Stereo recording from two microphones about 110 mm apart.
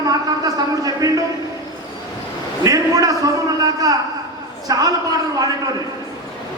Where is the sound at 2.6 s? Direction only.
35° right (ahead or behind).